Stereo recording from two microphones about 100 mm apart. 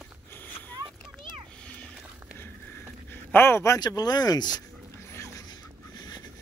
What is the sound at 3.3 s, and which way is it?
Speech, 25° left (ahead or behind).